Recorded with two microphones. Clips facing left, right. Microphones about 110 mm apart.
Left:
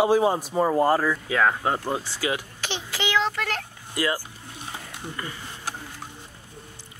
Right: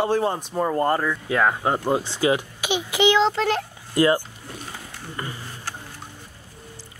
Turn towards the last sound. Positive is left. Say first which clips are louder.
# right 1 dB
turn(degrees=-25)  # may be behind; listen again after turning